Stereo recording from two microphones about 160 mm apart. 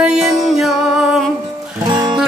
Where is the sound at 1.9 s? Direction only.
25° right (ahead or behind).